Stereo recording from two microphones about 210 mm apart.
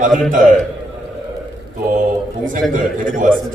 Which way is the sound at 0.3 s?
40° right (ahead or behind).